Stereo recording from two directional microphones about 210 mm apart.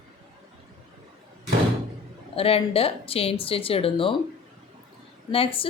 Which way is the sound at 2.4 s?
25° left (ahead or behind).